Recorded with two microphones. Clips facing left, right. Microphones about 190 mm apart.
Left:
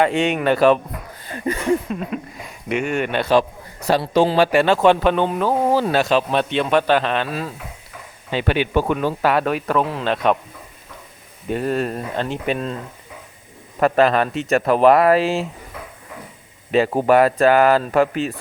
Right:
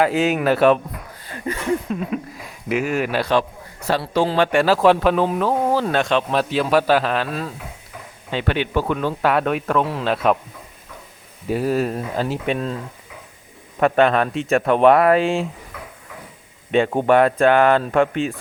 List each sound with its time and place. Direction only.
0.0 s speech: centre (ahead or behind)
1.9 s speech: centre (ahead or behind)
3.8 s a man's voice: 15° left (ahead or behind)
4.4 s speech: centre (ahead or behind)
11.4 s speech: 5° right (ahead or behind)
13.7 s speech: centre (ahead or behind)
16.7 s speech: 5° left (ahead or behind)